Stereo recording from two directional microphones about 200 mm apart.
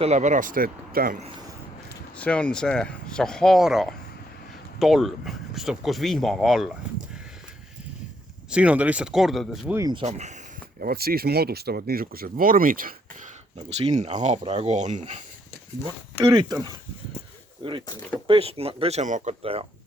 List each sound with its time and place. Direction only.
0.0 s speech: 35° right (ahead or behind)
2.1 s speech: 5° left (ahead or behind)
8.4 s speech: 5° right (ahead or behind)
9.7 s speech: 15° right (ahead or behind)
10.0 s speech: 35° right (ahead or behind)
10.8 s speech: 50° right (ahead or behind)
16.2 s speech: 20° right (ahead or behind)